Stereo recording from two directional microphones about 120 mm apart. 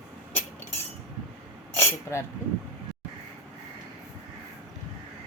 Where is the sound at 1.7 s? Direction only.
20° left (ahead or behind).